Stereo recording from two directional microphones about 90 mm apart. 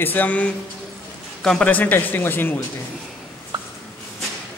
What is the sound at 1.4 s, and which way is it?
Speech, 5° left (ahead or behind).